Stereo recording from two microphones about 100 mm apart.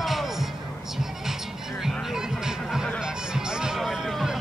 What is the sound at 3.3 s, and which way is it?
Music, 5° right (ahead or behind).